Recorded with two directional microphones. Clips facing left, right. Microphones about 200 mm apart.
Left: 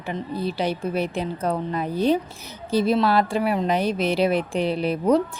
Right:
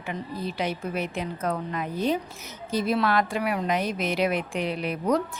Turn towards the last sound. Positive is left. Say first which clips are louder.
# left 5 dB
turn(degrees=30)  # may be behind; listen again after turning